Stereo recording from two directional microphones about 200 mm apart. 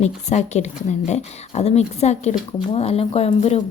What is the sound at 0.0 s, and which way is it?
Speech, 35° left (ahead or behind).